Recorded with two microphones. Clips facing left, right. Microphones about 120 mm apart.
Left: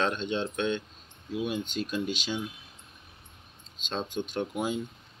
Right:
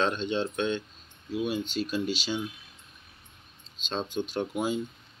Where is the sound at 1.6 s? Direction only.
50° left (ahead or behind).